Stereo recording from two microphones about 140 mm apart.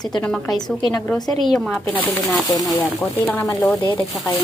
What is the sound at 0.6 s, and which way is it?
Speech, 30° left (ahead or behind).